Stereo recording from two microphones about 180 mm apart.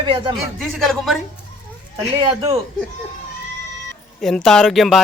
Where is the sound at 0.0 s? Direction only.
25° right (ahead or behind).